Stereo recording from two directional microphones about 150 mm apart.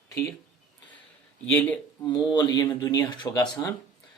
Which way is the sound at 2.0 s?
30° left (ahead or behind).